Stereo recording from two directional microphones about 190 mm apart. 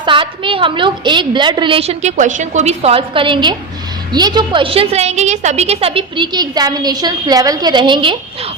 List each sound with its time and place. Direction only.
0.0 s a woman's voice: 25° right (ahead or behind)